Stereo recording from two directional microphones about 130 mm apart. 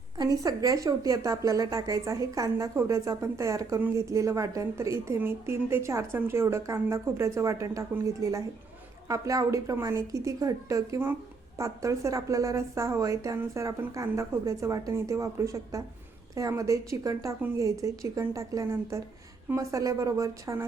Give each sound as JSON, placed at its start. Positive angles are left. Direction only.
{"t": 0.2, "sound": "a woman's voice", "side_deg": -25}
{"t": 3.8, "sound": "speech", "side_deg": -15}
{"t": 4.0, "sound": "a woman's voice", "side_deg": -25}